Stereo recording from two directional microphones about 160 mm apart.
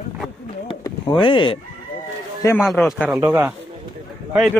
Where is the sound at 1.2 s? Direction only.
30° left (ahead or behind).